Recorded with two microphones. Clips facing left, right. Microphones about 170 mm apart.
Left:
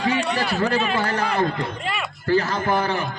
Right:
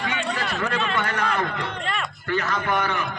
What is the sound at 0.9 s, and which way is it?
Speech, 30° left (ahead or behind).